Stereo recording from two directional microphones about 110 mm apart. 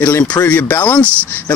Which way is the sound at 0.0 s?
25° left (ahead or behind).